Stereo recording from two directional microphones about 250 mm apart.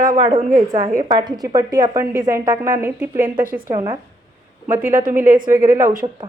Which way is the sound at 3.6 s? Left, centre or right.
Centre.